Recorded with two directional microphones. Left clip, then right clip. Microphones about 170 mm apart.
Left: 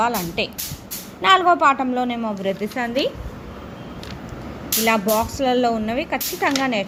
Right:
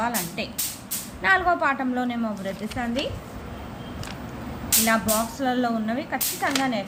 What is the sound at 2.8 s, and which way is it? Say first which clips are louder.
Speech: left 1 dB; 50° left (ahead or behind).